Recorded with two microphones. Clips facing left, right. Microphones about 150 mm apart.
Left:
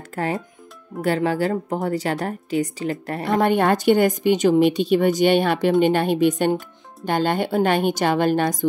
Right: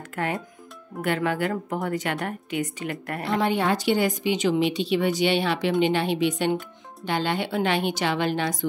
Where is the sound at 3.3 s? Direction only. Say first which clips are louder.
Left 5 dB; 50° left (ahead or behind).